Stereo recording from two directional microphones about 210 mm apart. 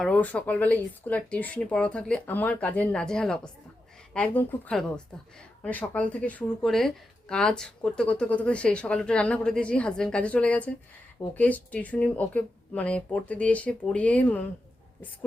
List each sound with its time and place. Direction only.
0.0 s speech: 5° left (ahead or behind)